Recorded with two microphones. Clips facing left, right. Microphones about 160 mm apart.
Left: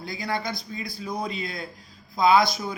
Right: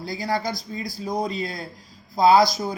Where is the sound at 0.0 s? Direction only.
35° right (ahead or behind).